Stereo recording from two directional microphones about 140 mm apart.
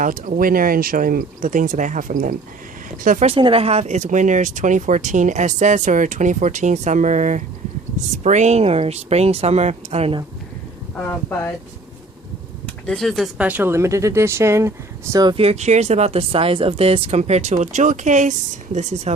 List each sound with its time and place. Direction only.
0.0 s speech: 75° right (ahead or behind)
3.2 s speech: 40° right (ahead or behind)
12.6 s speech: 5° left (ahead or behind); by 14.7 s 20° right (ahead or behind)
15.1 s speech: 30° right (ahead or behind)
15.4 s speech: 50° right (ahead or behind)